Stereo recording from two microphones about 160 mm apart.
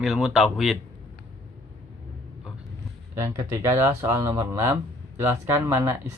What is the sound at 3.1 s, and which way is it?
Speech, 20° right (ahead or behind).